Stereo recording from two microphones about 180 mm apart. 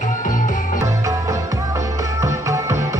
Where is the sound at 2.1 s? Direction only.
20° right (ahead or behind).